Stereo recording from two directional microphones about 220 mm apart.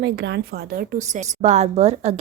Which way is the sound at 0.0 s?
50° right (ahead or behind).